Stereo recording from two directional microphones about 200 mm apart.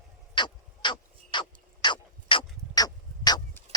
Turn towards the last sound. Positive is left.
turn(degrees=20)  # may be behind; listen again after turning